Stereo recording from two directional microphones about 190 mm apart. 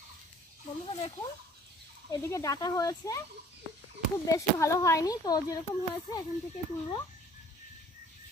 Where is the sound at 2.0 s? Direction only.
15° left (ahead or behind).